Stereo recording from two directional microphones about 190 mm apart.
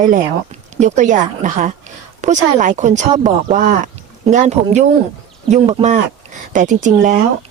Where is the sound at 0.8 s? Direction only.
40° right (ahead or behind).